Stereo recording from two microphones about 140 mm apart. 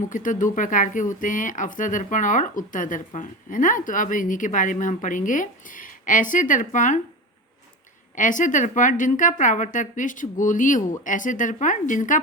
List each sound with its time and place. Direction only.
0.1 s speech: 70° left (ahead or behind)
8.1 s a woman's voice: 70° left (ahead or behind)